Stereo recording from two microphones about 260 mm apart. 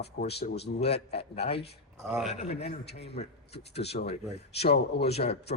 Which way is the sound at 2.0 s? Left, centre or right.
Centre.